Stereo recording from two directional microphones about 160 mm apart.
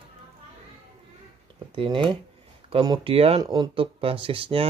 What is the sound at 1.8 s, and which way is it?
Speech, 35° right (ahead or behind).